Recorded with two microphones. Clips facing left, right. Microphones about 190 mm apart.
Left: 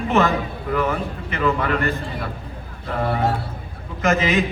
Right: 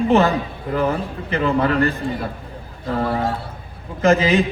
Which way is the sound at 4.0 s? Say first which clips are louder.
Right 4 dB; 30° right (ahead or behind).